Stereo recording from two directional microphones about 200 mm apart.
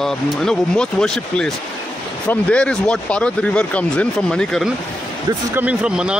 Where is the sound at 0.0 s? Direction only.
Centre (ahead or behind).